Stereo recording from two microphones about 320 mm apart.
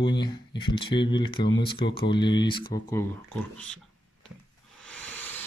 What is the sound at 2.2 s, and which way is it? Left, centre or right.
Speech, centre.